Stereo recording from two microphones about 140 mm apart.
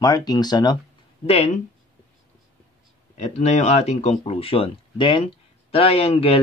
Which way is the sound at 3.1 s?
55° left (ahead or behind).